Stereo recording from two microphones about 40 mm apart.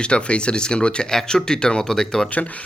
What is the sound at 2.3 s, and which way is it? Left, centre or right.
Speech, left.